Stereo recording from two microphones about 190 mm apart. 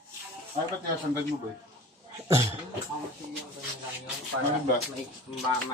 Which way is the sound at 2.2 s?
15° right (ahead or behind).